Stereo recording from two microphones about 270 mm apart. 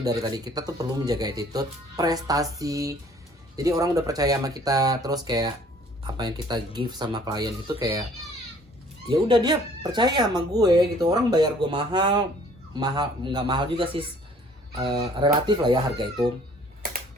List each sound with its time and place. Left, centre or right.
0.0 s speech: centre
9.0 s speech: centre